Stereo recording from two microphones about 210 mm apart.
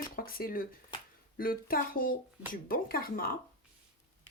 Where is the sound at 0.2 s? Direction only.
45° left (ahead or behind).